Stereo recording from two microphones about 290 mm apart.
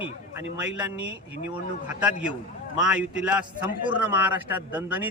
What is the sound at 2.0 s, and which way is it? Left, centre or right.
A man's voice, centre.